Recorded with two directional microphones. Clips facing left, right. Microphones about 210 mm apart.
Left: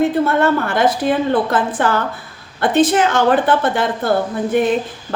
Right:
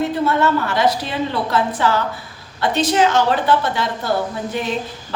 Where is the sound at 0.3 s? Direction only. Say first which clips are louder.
Left 2 dB; 55° left (ahead or behind).